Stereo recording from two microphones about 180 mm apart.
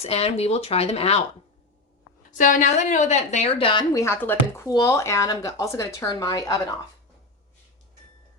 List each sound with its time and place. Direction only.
0.0 s a woman's voice: 35° left (ahead or behind)
2.4 s a woman's voice: 45° left (ahead or behind); by 3.8 s 30° left (ahead or behind)
3.9 s speech: 15° left (ahead or behind)